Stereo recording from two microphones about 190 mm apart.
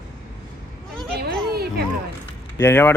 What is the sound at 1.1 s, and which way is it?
Speech, 55° right (ahead or behind).